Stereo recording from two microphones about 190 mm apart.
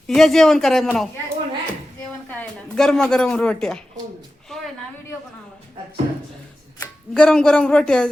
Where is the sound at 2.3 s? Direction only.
5° left (ahead or behind).